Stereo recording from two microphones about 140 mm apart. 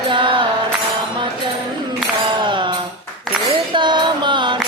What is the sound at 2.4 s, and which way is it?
Tambourine, 35° right (ahead or behind).